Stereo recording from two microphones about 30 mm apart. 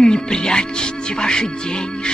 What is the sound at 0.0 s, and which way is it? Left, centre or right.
Music, left.